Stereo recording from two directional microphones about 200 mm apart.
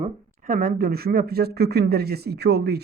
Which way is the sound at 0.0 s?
45° right (ahead or behind).